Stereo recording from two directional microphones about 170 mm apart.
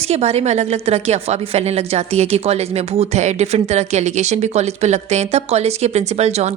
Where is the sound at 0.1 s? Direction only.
40° right (ahead or behind).